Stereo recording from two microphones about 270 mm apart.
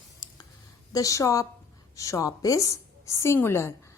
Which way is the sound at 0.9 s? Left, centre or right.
Centre.